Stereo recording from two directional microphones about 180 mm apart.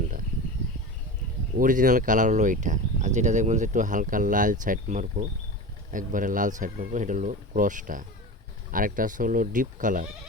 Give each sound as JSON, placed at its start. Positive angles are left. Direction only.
{"t": 1.5, "sound": "speech", "side_deg": -50}